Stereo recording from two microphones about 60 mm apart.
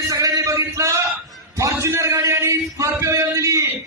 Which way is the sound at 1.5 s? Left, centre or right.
Right.